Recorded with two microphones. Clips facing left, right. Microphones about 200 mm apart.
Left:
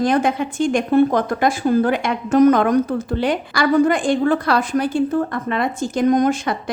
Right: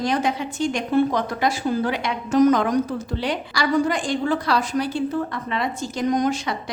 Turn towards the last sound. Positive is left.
turn(degrees=55)  # may be behind; listen again after turning